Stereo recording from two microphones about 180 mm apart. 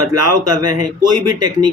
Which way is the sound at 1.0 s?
25° right (ahead or behind).